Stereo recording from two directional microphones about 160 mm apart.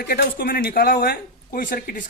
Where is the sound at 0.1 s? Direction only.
70° left (ahead or behind).